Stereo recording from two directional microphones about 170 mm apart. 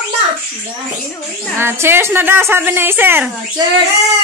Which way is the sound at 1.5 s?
15° right (ahead or behind).